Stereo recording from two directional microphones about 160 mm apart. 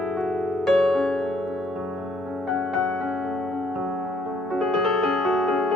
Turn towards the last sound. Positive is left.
turn(degrees=0)  # may be behind; listen again after turning